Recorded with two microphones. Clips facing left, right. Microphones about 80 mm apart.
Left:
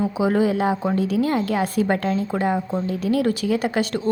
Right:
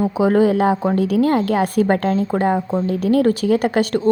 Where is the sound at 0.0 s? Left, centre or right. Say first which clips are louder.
Right 5 dB; right.